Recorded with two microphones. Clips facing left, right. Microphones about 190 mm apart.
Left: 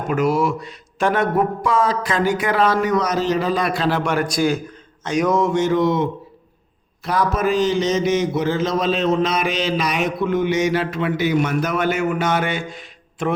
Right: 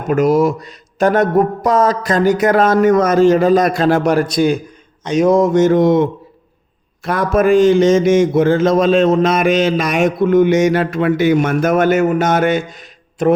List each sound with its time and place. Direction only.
0.1 s a man's voice: 40° right (ahead or behind)
4.3 s a man's voice: 20° right (ahead or behind); by 13.3 s 40° right (ahead or behind)